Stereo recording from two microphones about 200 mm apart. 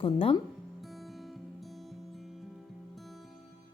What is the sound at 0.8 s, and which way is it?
Music, centre (ahead or behind).